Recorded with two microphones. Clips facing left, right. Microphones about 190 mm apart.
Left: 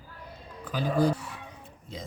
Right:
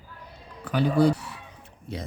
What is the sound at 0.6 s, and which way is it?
Speech, 70° right (ahead or behind).